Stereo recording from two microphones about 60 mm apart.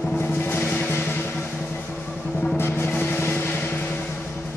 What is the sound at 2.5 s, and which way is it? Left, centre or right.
Music, left.